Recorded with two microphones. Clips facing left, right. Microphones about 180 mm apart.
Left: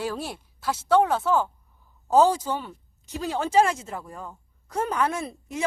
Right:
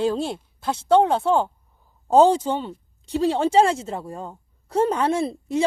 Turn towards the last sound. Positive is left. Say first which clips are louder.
# right 9 dB
turn(degrees=-30)  # may be behind; listen again after turning